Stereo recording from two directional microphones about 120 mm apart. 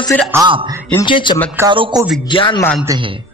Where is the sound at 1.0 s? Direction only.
40° left (ahead or behind).